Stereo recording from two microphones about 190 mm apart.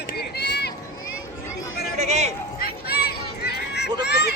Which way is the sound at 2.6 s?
55° left (ahead or behind).